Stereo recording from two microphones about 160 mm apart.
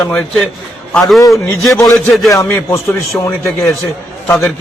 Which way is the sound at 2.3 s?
20° left (ahead or behind).